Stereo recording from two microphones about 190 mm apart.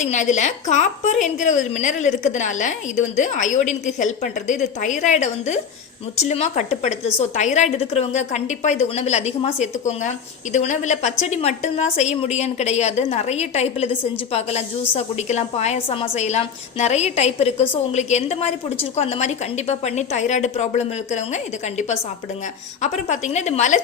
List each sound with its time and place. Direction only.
0.0 s a woman's voice: 40° left (ahead or behind)